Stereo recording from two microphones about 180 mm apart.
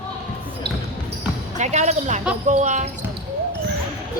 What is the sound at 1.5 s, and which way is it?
Speech, 40° right (ahead or behind).